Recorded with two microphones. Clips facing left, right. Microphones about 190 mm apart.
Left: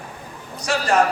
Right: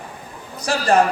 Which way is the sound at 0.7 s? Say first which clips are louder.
Right 2 dB; 35° right (ahead or behind).